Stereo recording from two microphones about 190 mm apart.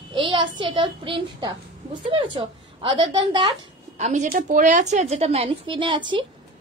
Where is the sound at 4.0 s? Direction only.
40° right (ahead or behind).